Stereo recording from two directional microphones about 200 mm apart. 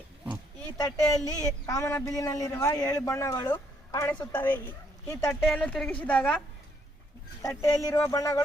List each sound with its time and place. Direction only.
0.8 s a woman's voice: 20° left (ahead or behind)
7.4 s speech: 15° left (ahead or behind)